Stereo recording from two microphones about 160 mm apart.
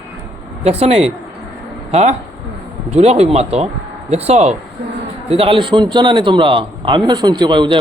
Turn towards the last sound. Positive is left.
turn(degrees=-30)  # may be behind; listen again after turning